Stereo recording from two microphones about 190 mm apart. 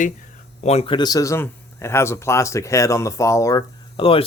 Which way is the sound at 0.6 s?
35° left (ahead or behind).